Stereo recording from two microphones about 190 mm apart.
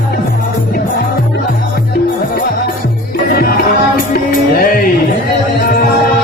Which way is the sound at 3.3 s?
50° left (ahead or behind).